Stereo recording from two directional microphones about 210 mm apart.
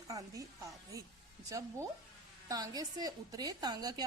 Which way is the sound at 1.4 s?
15° right (ahead or behind).